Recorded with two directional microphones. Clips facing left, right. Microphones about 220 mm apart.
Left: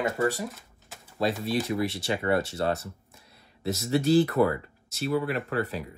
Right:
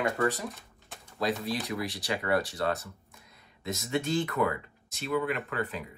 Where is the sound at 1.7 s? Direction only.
25° left (ahead or behind).